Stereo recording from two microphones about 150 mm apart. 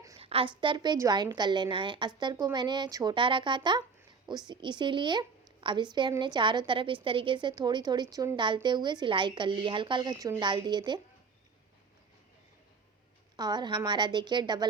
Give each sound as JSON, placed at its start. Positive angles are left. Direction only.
{"t": 0.2, "sound": "a sound", "side_deg": -40}
{"t": 0.6, "sound": "a woman's voice", "side_deg": -30}
{"t": 13.3, "sound": "a woman's voice", "side_deg": -25}